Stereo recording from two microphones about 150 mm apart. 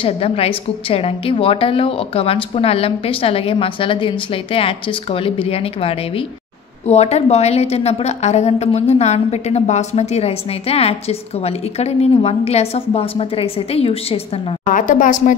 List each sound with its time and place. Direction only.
0.0 s a woman's voice: 40° left (ahead or behind)
14.7 s a woman's voice: 60° left (ahead or behind)